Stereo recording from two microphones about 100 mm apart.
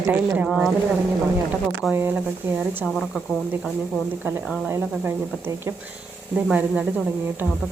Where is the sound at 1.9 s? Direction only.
20° right (ahead or behind).